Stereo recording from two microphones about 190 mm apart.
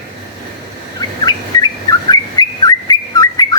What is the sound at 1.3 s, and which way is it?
Bird, 20° left (ahead or behind).